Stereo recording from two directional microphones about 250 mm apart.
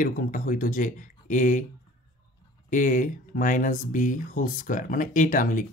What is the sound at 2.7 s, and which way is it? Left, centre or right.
Speech, left.